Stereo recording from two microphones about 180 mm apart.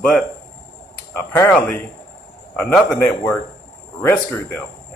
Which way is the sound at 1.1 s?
15° left (ahead or behind).